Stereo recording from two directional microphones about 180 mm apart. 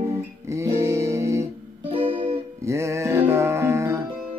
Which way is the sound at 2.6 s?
15° right (ahead or behind).